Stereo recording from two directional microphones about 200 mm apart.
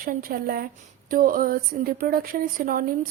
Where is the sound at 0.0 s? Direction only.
45° right (ahead or behind).